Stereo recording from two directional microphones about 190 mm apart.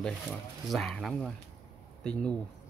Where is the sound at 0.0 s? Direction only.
5° left (ahead or behind).